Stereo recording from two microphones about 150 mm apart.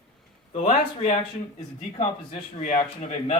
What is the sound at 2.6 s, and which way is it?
Speech, 50° left (ahead or behind).